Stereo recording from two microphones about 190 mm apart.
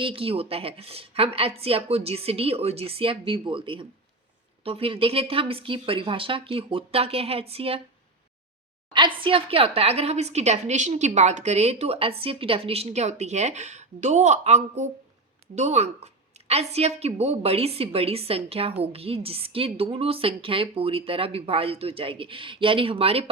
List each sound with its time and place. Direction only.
0.0 s a woman's voice: 30° right (ahead or behind)
8.9 s a woman's voice: 25° right (ahead or behind)